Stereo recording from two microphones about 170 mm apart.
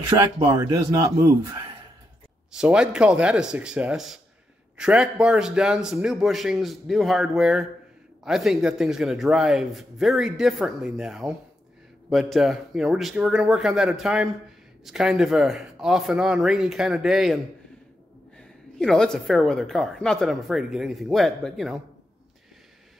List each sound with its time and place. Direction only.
0.2 s a man's voice: 20° right (ahead or behind)
2.5 s a man's voice: 5° right (ahead or behind)
18.8 s a man's voice: 5° left (ahead or behind)